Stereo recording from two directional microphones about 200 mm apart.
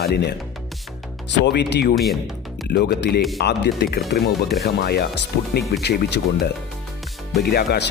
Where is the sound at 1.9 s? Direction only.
Centre (ahead or behind).